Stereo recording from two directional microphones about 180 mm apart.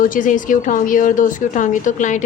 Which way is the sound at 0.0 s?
45° left (ahead or behind).